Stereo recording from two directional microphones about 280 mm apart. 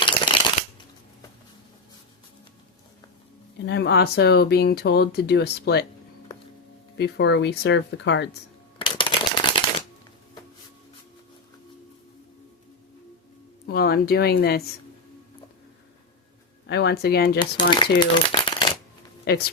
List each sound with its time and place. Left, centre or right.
3.7 s speech: left
6.9 s speech: left
8.8 s shuffling cards: centre
13.7 s speech: left
16.6 s speech: left
17.4 s speech: centre
18.0 s crumpling: centre
19.3 s speech: left